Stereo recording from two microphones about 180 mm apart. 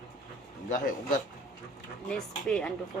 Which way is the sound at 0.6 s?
50° left (ahead or behind).